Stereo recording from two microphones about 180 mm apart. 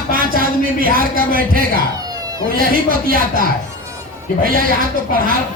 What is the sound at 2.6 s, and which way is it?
Speech, 55° right (ahead or behind).